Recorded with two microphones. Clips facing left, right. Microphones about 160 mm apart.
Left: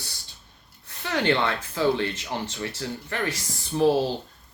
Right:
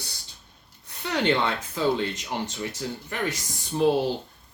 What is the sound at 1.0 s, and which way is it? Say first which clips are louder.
Speech: even; 15° right (ahead or behind).